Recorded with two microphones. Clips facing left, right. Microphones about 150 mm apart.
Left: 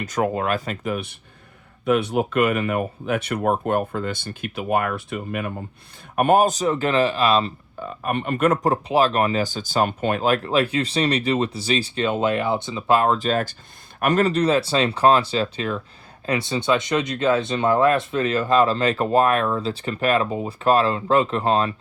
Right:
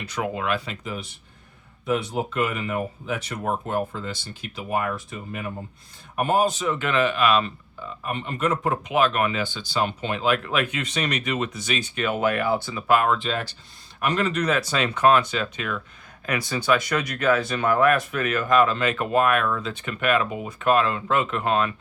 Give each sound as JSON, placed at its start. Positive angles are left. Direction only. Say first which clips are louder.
{"t": 0.0, "sound": "speech", "louder": "left 5 dB", "side_deg": 45}
{"t": 7.8, "sound": "speech", "louder": "left 6 dB", "side_deg": 55}
{"t": 8.6, "sound": "speech", "louder": "left 3 dB", "side_deg": 35}